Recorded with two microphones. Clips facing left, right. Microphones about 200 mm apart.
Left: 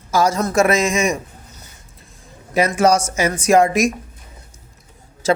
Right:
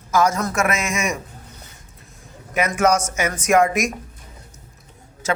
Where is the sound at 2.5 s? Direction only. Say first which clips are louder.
Left 3 dB; 30° left (ahead or behind).